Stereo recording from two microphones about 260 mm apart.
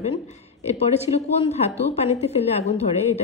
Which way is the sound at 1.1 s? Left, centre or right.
Left.